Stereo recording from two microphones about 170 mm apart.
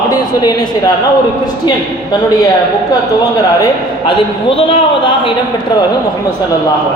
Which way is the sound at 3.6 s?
30° left (ahead or behind).